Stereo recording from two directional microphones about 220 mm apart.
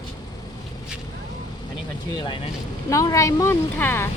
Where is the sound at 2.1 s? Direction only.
20° left (ahead or behind).